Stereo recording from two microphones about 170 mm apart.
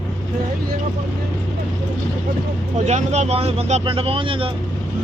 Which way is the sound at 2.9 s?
45° right (ahead or behind).